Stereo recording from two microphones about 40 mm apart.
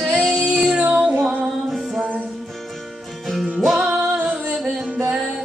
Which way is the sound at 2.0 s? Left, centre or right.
Right.